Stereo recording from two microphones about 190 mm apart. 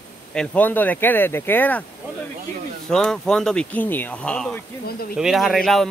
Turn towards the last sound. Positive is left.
turn(degrees=0)  # may be behind; listen again after turning